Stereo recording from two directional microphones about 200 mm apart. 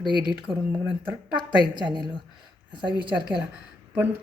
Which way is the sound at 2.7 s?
25° right (ahead or behind).